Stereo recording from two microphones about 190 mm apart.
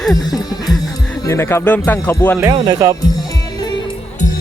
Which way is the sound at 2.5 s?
20° right (ahead or behind).